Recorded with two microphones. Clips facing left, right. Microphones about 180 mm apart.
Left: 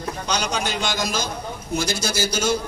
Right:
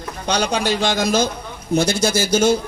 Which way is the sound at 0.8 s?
60° right (ahead or behind).